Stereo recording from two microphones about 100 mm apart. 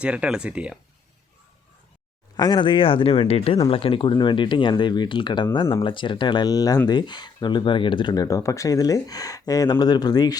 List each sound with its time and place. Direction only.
0.0 s speech: 10° right (ahead or behind)
2.3 s speech: 45° left (ahead or behind); by 3.1 s 65° left (ahead or behind)
3.2 s speech: 80° left
3.7 s speech: 65° left (ahead or behind); by 10.3 s 40° left (ahead or behind)